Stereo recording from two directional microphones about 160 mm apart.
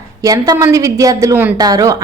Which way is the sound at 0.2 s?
20° right (ahead or behind).